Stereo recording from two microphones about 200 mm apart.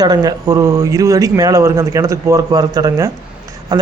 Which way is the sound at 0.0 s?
20° right (ahead or behind).